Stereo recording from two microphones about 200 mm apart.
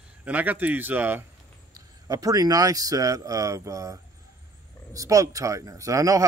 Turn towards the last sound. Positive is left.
turn(degrees=-15)  # may be behind; listen again after turning